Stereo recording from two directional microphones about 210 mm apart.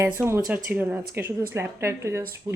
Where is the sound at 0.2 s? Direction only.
10° right (ahead or behind).